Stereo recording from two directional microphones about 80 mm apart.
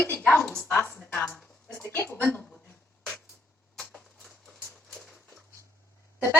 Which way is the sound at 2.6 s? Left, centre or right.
Left.